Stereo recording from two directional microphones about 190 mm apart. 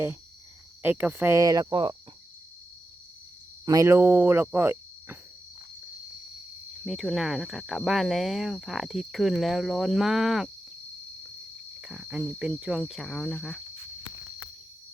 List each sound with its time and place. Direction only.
0.8 s speech: 10° right (ahead or behind)
3.7 s speech: 15° right (ahead or behind)
6.8 s speech: centre (ahead or behind)
11.8 s speech: 5° right (ahead or behind)